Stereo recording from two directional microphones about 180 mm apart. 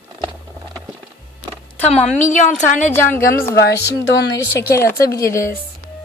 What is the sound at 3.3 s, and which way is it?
Speech, 60° left (ahead or behind).